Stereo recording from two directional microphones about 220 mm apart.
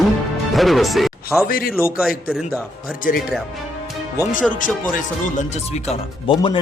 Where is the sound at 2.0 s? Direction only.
Centre (ahead or behind).